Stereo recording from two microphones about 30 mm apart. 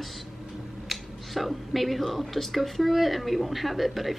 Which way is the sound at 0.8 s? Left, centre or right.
Centre.